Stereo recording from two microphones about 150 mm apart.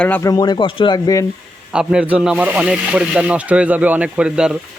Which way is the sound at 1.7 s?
5° right (ahead or behind).